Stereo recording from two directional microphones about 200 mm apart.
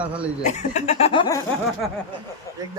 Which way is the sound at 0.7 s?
35° left (ahead or behind).